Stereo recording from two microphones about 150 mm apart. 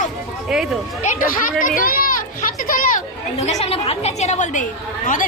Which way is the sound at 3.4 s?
45° left (ahead or behind).